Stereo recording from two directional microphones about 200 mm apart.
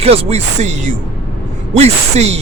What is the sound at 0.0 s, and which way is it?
A man's voice, 30° right (ahead or behind).